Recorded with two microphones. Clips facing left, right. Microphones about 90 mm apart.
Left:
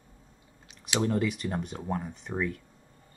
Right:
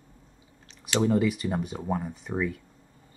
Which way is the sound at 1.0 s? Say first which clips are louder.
Right 5 dB; centre (ahead or behind).